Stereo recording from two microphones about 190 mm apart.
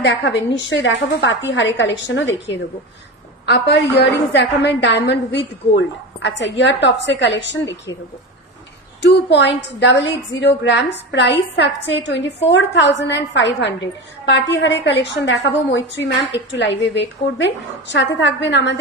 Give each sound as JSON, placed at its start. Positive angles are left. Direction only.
{"t": 0.0, "sound": "a woman's voice", "side_deg": 70}
{"t": 3.4, "sound": "a woman's voice", "side_deg": 60}
{"t": 9.0, "sound": "a woman's voice", "side_deg": 65}